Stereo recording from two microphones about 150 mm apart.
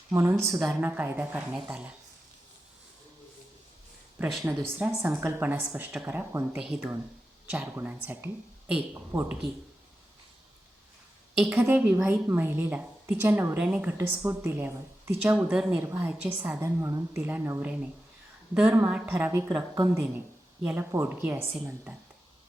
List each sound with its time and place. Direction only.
0.1 s a woman's voice: 20° right (ahead or behind)
4.2 s a woman's voice: 5° right (ahead or behind)
11.3 s a woman's voice: 15° right (ahead or behind)
15.4 s a woman's voice: 5° right (ahead or behind)